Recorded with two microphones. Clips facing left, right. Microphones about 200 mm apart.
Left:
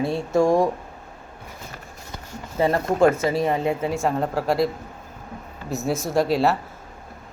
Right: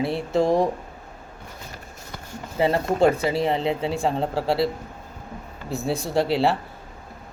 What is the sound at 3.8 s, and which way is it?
Speech, 30° right (ahead or behind).